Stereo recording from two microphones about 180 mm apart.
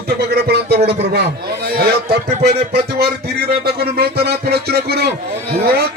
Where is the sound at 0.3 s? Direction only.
65° right (ahead or behind).